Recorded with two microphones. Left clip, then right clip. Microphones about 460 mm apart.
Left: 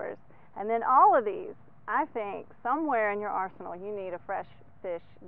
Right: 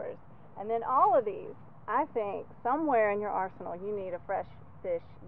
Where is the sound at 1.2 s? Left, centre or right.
Left.